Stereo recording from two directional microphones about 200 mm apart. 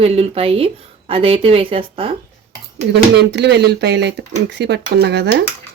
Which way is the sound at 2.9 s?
60° right (ahead or behind).